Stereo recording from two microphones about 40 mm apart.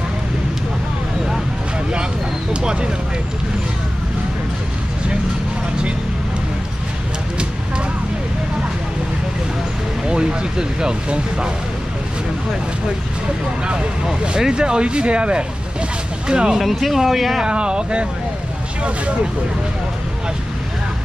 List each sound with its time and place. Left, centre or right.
2.5 s speech: right
10.0 s speech: right
14.5 s speech: right
16.5 s speech: centre
17.4 s speech: right